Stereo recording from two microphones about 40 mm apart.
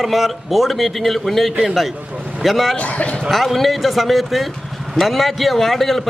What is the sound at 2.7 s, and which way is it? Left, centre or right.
Speech, left.